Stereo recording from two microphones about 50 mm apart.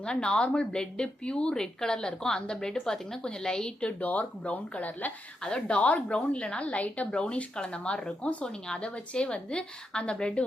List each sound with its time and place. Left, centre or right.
0.0 s speech: centre
4.0 s speech: left
5.4 s a woman's voice: centre